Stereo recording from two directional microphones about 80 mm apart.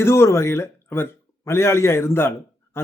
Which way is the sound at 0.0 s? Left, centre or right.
Left.